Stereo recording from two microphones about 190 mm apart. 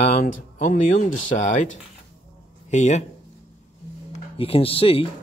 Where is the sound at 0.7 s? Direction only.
40° left (ahead or behind).